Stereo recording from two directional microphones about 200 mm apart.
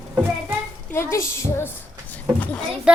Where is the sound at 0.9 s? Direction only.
15° left (ahead or behind).